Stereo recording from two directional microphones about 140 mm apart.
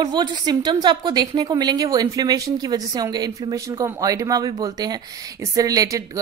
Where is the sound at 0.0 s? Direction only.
30° right (ahead or behind).